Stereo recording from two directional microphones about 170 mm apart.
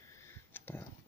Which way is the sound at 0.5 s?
10° left (ahead or behind).